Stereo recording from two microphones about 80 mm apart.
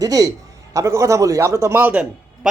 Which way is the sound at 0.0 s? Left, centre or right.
Right.